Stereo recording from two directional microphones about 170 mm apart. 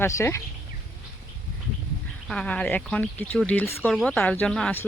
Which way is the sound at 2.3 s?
5° left (ahead or behind).